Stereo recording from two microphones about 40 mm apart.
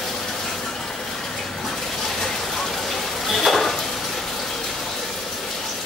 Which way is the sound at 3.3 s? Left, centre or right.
Centre.